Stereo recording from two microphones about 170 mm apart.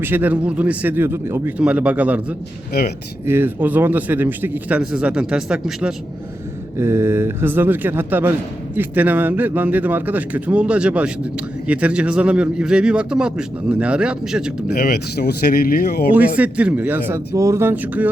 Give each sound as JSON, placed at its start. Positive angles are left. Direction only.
{"t": 0.0, "sound": "a man's voice", "side_deg": -10}
{"t": 2.7, "sound": "speech", "side_deg": 65}
{"t": 3.2, "sound": "a man's voice", "side_deg": -15}
{"t": 6.7, "sound": "a man's voice", "side_deg": -15}
{"t": 14.7, "sound": "speech", "side_deg": 70}
{"t": 16.4, "sound": "a man's voice", "side_deg": -10}